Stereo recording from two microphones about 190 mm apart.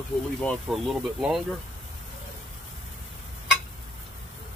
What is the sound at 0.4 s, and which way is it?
Speech, centre (ahead or behind).